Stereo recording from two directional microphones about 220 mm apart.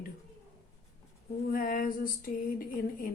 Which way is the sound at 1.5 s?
40° left (ahead or behind).